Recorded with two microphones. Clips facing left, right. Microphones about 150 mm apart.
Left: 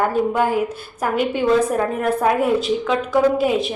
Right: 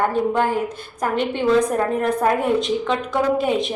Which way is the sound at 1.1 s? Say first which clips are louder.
Left 1 dB; 5° left (ahead or behind).